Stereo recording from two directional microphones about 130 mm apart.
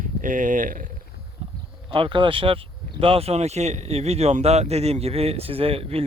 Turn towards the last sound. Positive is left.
turn(degrees=-50)  # may be behind; listen again after turning